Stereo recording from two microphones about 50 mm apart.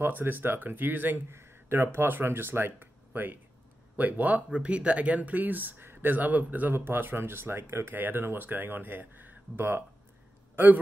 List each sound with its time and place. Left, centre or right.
0.0 s speech: right
1.3 s speech: right
4.5 s speech: right
10.5 s a sound: right